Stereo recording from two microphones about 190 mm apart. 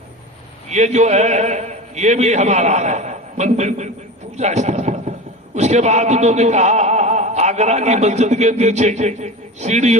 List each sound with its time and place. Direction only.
0.7 s speech: 35° right (ahead or behind)
4.4 s a sound: 35° right (ahead or behind)
5.5 s speech: 35° right (ahead or behind)